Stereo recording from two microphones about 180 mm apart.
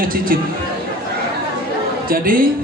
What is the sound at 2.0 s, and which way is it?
Speech, 50° right (ahead or behind).